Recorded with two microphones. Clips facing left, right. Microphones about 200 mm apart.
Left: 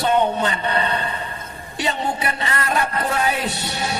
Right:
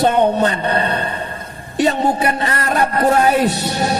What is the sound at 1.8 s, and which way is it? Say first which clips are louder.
Speech: right 7 dB; 45° right (ahead or behind).